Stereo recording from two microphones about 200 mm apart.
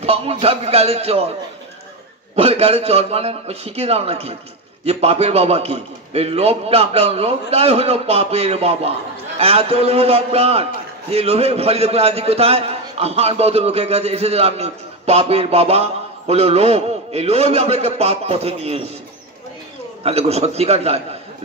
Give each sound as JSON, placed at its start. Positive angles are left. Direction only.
{"t": 0.0, "sound": "a man's voice", "side_deg": -30}
{"t": 2.3, "sound": "a man's voice", "side_deg": -30}
{"t": 20.0, "sound": "a man's voice", "side_deg": -30}